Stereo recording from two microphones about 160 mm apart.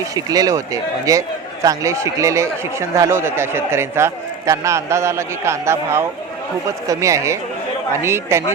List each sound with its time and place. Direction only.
0.0 s speech: 20° right (ahead or behind)